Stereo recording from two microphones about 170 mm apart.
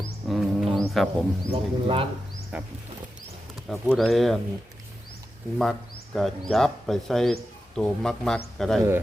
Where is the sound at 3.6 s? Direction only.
5° left (ahead or behind).